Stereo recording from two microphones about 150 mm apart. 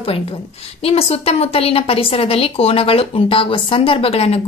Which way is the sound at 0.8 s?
40° left (ahead or behind).